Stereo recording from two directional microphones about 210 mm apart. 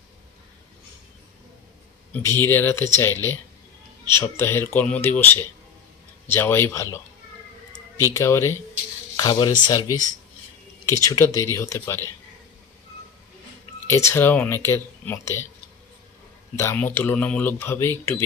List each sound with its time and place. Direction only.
2.1 s speech: 10° left (ahead or behind)
4.1 s speech: 10° left (ahead or behind)
8.1 s speech: 15° left (ahead or behind)
13.8 s speech: 15° left (ahead or behind)
16.6 s speech: 10° left (ahead or behind)